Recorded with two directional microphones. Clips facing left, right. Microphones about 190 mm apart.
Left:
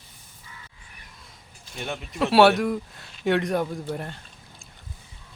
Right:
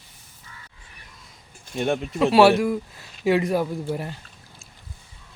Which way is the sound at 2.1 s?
Centre (ahead or behind).